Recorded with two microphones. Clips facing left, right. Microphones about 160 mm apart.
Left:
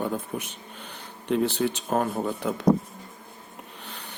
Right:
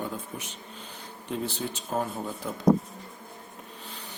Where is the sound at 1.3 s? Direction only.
70° left (ahead or behind).